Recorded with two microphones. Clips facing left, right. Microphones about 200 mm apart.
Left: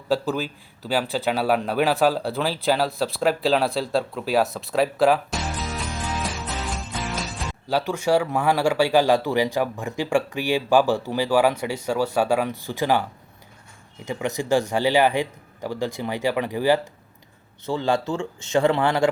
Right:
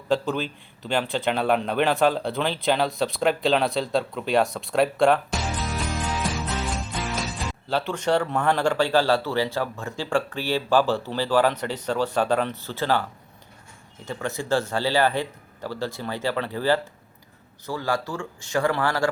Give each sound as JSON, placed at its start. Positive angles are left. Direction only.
{"t": 0.1, "sound": "speech", "side_deg": 5}
{"t": 7.7, "sound": "speech", "side_deg": 10}
{"t": 17.7, "sound": "speech", "side_deg": 25}